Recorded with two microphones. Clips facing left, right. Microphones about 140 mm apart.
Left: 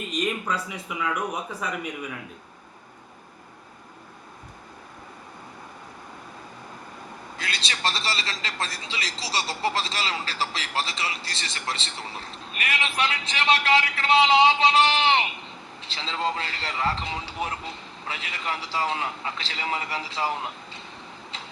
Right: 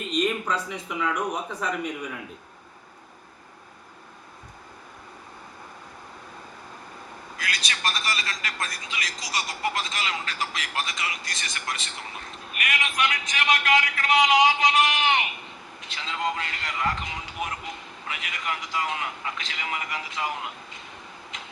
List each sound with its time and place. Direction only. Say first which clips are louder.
0.1 s speech: right 3 dB; 5° left (ahead or behind)
7.3 s a sound: even; 30° left (ahead or behind)
15.8 s a man's voice: left 1 dB; 30° left (ahead or behind)
21.3 s tick-tock: left 2 dB; 30° left (ahead or behind)